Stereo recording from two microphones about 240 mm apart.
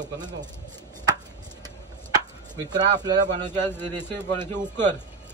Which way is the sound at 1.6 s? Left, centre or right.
Centre.